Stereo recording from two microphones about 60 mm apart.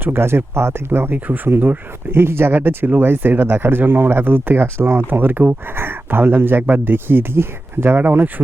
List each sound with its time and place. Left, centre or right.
0.0 s speech: right